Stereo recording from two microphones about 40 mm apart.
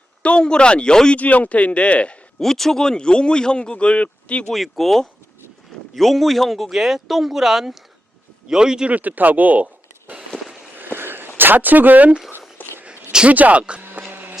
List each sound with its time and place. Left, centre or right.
0.2 s speech: left
1.1 s speech: left
2.4 s speech: centre; by 4.4 s left
4.5 s speech: centre
8.9 s speech: right
10.8 s a sound: right
11.3 s speech: right
12.6 s a sound: left
13.2 s speech: right
14.1 s vehicle: right